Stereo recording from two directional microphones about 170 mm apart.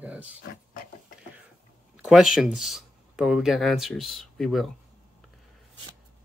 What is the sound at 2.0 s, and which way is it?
Speech, 5° right (ahead or behind).